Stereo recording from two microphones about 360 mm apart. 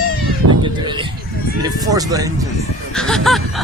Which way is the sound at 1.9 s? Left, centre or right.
Centre.